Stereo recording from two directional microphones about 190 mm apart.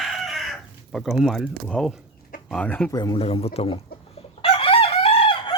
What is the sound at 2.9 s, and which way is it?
Speech, 20° left (ahead or behind).